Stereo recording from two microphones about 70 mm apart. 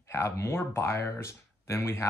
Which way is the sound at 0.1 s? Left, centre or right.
Left.